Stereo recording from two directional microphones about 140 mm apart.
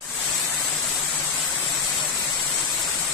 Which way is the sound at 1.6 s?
Centre (ahead or behind).